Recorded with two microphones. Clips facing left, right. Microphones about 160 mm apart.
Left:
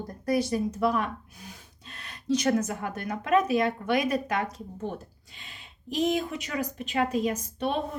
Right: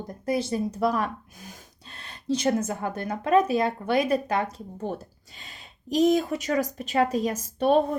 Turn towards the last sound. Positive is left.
turn(degrees=-40)  # may be behind; listen again after turning